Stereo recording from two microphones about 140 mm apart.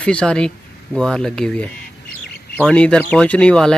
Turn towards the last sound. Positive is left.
turn(degrees=5)  # may be behind; listen again after turning